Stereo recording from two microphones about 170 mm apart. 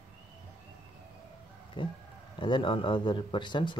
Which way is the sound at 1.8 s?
30° left (ahead or behind).